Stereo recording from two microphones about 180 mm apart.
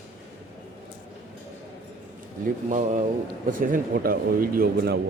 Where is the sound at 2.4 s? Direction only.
45° right (ahead or behind).